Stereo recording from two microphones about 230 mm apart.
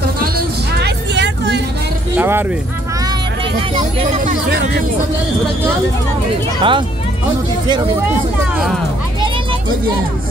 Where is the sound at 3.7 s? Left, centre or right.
Right.